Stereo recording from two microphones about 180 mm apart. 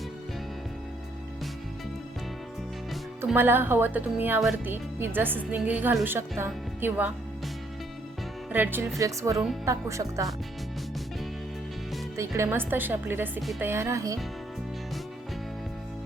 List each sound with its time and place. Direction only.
3.2 s speech: 10° right (ahead or behind)
8.5 s speech: 10° right (ahead or behind)
12.4 s speech: 10° right (ahead or behind)